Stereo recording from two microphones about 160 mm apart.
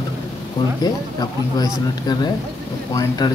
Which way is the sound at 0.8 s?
25° left (ahead or behind).